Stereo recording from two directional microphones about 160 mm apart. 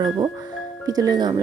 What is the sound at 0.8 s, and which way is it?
Speech, 25° right (ahead or behind).